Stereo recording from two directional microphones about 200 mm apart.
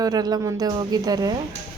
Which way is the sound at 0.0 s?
20° right (ahead or behind).